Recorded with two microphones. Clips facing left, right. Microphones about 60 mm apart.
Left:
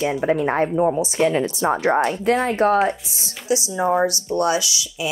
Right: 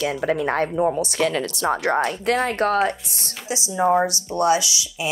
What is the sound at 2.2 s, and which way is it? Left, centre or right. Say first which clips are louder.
Speech: left 3 dB; right.